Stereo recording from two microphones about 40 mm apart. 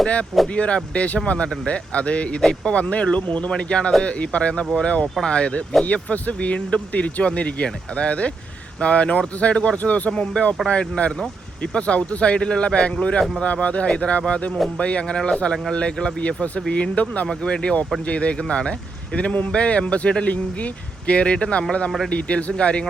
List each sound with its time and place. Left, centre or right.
0.4 s speech: left
9.7 s speech: left
17.2 s speech: left